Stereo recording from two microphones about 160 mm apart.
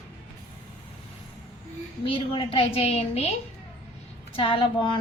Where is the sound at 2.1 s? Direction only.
30° left (ahead or behind).